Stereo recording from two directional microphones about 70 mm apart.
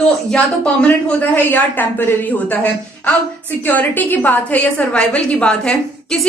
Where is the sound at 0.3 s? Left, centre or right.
Centre.